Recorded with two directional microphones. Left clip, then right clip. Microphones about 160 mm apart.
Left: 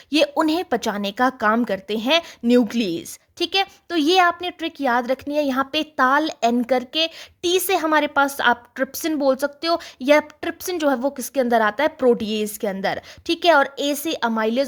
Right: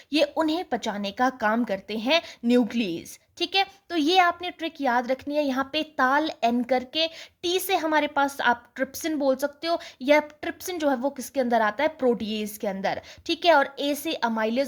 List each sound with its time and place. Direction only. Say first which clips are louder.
0.1 s speech: left 5 dB; 30° left (ahead or behind)